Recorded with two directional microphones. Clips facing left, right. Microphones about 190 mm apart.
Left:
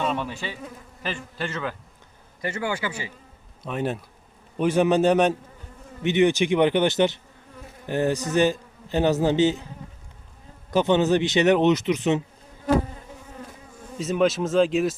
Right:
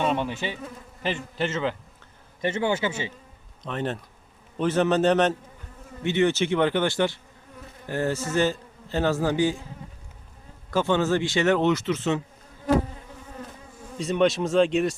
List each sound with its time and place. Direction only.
0.0 s bee: 20° right (ahead or behind)
1.0 s a man's voice: 20° right (ahead or behind)
3.6 s a man's voice: 10° left (ahead or behind)
10.7 s speech: 20° left (ahead or behind)
14.0 s speech: centre (ahead or behind)